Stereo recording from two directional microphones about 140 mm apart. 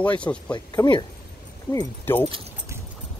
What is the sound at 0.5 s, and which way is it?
Speech, 30° left (ahead or behind).